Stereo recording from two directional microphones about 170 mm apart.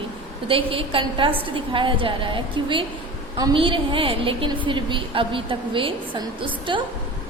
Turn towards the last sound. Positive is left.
turn(degrees=-30)  # may be behind; listen again after turning